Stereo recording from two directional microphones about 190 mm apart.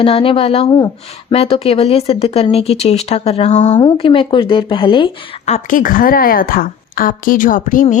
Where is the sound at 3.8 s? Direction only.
25° left (ahead or behind).